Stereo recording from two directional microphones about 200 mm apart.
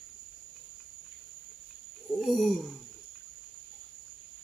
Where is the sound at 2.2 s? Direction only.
Centre (ahead or behind).